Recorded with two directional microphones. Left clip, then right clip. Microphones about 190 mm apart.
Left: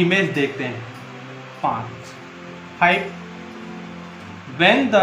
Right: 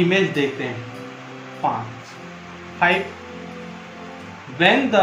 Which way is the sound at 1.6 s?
20° left (ahead or behind).